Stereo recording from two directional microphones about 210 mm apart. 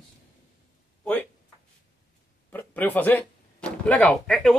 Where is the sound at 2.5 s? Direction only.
10° left (ahead or behind).